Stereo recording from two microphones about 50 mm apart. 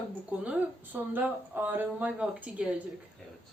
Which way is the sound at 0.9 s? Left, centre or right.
Right.